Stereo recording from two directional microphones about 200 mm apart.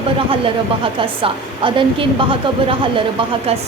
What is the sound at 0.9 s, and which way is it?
A woman's voice, 25° right (ahead or behind).